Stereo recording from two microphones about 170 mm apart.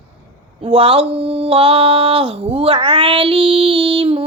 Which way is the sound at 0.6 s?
30° right (ahead or behind).